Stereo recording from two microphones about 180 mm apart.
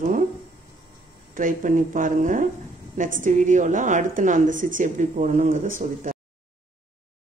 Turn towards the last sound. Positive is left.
turn(degrees=-50)  # may be behind; listen again after turning